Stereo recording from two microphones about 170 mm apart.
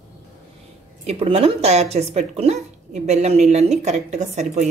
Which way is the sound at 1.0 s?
35° right (ahead or behind).